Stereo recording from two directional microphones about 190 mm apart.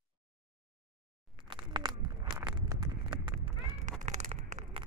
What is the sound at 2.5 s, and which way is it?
Horse, 25° right (ahead or behind).